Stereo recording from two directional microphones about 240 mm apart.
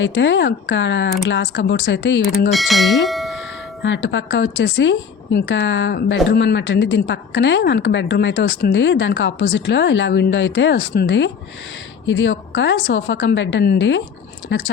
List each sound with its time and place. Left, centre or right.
0.0 s a woman's voice: left
2.5 s speech: centre
3.1 s music: centre
3.8 s a woman's voice: left